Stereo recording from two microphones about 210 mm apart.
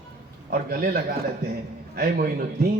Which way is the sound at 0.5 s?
40° right (ahead or behind).